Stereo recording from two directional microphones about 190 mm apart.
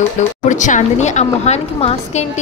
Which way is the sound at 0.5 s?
40° left (ahead or behind).